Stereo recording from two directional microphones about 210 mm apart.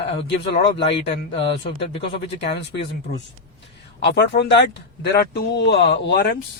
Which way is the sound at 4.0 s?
55° left (ahead or behind).